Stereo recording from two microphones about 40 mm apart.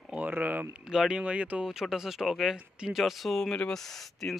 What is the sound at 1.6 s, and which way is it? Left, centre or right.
Speech, centre.